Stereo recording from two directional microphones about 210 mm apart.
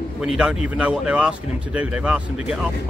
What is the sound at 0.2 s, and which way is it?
Speech, 5° right (ahead or behind).